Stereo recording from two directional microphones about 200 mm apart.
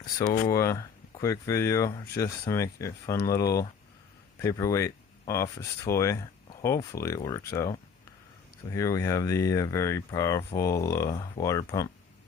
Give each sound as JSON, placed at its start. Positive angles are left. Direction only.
{"t": 0.2, "sound": "speech", "side_deg": 40}
{"t": 0.5, "sound": "speech", "side_deg": 15}